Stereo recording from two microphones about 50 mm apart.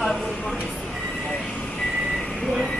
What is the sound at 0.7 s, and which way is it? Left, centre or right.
Train, centre.